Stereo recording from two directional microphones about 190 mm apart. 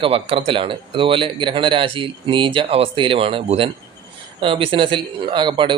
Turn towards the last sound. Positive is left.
turn(degrees=-25)  # may be behind; listen again after turning